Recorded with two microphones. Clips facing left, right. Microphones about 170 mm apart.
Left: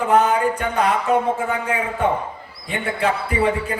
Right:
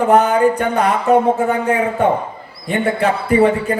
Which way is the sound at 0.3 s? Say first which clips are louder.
Right 6 dB; 40° right (ahead or behind).